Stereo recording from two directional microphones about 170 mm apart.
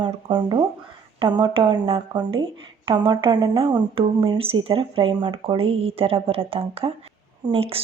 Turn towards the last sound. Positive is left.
turn(degrees=-35)  # may be behind; listen again after turning